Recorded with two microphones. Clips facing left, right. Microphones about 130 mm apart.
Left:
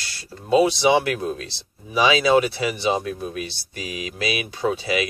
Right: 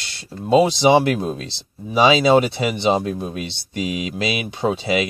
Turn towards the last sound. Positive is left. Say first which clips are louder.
# right 3 dB
turn(degrees=-25)  # may be behind; listen again after turning